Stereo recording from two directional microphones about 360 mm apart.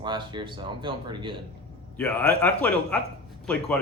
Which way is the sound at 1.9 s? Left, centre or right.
Centre.